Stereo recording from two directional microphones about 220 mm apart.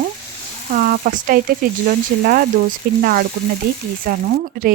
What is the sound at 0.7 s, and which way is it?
Speech, 40° right (ahead or behind).